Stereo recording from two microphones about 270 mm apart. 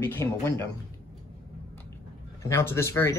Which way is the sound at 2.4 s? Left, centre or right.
Centre.